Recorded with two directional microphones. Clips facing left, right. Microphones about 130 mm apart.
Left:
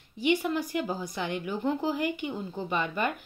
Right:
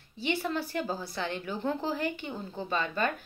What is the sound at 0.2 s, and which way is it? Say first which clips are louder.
A woman's voice: left 4 dB; 15° left (ahead or behind).